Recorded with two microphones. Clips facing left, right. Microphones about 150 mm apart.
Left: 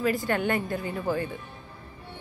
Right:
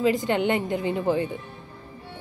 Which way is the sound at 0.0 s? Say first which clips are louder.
Right 4 dB; 20° right (ahead or behind).